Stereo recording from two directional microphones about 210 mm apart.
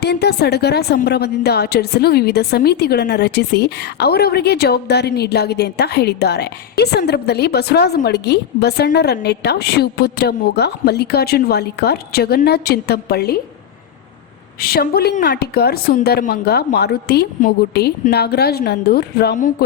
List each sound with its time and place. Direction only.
0.0 s a woman's voice: 50° left (ahead or behind)
14.6 s a woman's voice: 45° left (ahead or behind)